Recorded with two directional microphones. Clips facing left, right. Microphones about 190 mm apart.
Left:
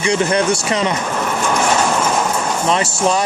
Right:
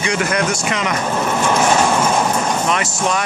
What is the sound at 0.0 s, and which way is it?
Speech, 30° left (ahead or behind).